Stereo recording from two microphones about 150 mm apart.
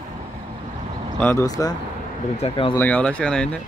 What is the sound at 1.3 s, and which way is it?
Speech, 25° left (ahead or behind).